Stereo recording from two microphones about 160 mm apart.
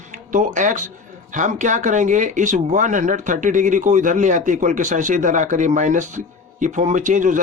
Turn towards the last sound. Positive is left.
turn(degrees=-50)  # may be behind; listen again after turning